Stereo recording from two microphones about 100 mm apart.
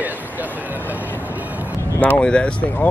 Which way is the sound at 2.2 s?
10° left (ahead or behind).